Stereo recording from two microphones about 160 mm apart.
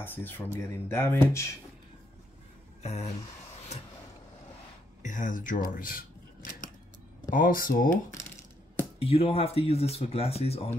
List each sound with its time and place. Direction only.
0.0 s speech: 10° left (ahead or behind)
2.8 s speech: 45° left (ahead or behind)
5.0 s speech: 50° left (ahead or behind)
9.0 s speech: 40° left (ahead or behind)